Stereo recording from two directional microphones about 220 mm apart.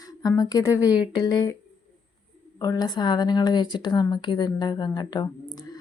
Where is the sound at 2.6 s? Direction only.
15° left (ahead or behind).